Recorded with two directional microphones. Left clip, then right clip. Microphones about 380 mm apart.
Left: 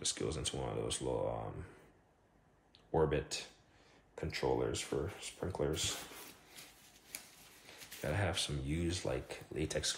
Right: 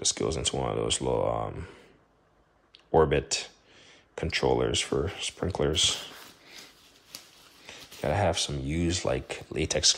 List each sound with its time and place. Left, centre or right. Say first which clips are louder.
0.0 s speech: right 10 dB; centre
2.9 s speech: right 11 dB; centre
7.6 s speech: right 10 dB; centre